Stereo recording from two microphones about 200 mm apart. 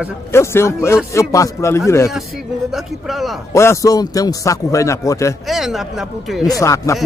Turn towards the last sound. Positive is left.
turn(degrees=15)  # may be behind; listen again after turning